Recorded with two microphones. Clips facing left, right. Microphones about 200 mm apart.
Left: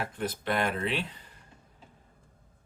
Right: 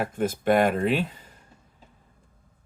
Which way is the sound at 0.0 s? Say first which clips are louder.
Right 8 dB; 50° right (ahead or behind).